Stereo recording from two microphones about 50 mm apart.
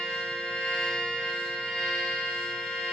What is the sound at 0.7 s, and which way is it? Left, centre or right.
Music, centre.